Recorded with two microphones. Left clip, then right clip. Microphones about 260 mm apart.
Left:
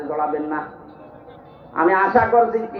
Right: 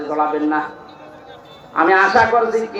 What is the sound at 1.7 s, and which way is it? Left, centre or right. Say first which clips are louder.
Speech: right 3 dB; right.